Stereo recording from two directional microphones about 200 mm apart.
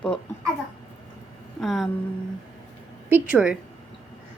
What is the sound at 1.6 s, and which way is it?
Speech, centre (ahead or behind).